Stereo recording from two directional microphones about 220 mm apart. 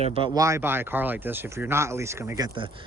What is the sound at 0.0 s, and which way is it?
Speech, 25° right (ahead or behind).